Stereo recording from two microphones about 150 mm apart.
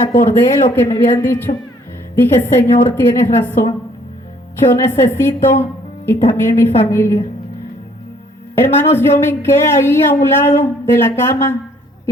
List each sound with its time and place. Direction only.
0.1 s a woman's voice: 15° left (ahead or behind)
4.7 s a woman's voice: 15° left (ahead or behind)
8.5 s a woman's voice: 15° left (ahead or behind)